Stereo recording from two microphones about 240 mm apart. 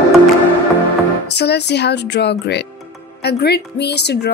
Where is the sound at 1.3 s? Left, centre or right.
Left.